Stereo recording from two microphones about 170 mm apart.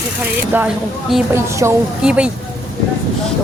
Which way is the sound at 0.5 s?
10° right (ahead or behind).